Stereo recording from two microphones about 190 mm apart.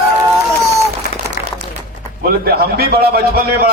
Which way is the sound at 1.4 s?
50° left (ahead or behind).